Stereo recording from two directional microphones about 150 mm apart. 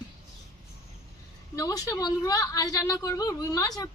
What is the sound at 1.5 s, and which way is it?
A woman's voice, 25° left (ahead or behind).